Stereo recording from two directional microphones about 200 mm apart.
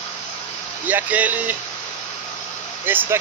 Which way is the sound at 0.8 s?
10° right (ahead or behind).